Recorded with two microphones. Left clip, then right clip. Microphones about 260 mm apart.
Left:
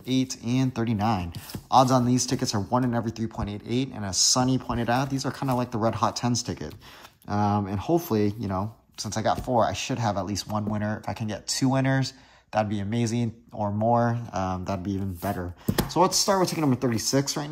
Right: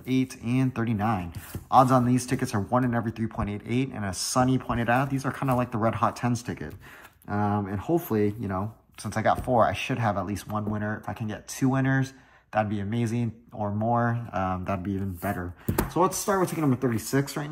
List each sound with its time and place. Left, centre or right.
0.0 s speech: centre